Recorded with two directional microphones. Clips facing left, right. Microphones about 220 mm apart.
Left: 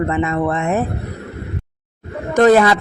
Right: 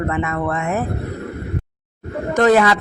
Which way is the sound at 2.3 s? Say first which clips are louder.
Left 3 dB; 35° left (ahead or behind).